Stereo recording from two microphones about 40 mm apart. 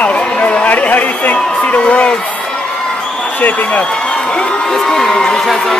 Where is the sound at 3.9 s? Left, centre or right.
Left.